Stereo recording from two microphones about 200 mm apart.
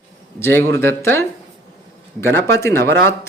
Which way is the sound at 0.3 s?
10° left (ahead or behind).